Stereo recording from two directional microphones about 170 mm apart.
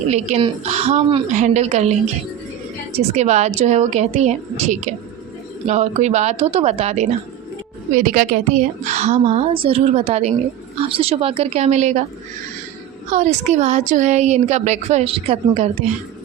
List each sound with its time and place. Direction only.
0.1 s a woman's voice: 40° right (ahead or behind)
7.9 s a woman's voice: 50° right (ahead or behind)
13.1 s speech: 45° right (ahead or behind)